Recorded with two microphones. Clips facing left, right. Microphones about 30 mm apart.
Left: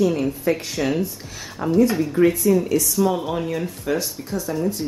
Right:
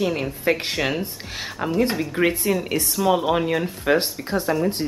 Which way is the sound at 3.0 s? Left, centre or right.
Right.